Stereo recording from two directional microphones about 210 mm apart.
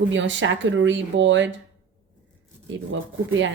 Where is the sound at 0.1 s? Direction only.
60° right (ahead or behind).